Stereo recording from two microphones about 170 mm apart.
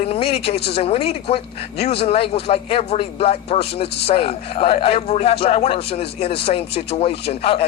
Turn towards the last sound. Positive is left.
turn(degrees=35)  # may be behind; listen again after turning